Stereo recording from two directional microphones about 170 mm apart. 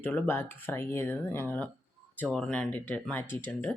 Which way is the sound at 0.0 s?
10° left (ahead or behind).